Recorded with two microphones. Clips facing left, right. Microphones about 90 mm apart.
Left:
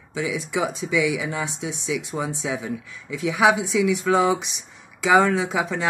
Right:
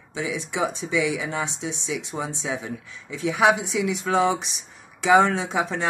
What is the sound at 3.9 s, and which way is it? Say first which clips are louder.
Speech: left 1 dB; 30° right (ahead or behind).